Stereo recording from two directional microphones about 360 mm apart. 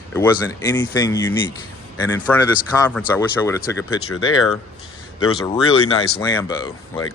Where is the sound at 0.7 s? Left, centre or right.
Centre.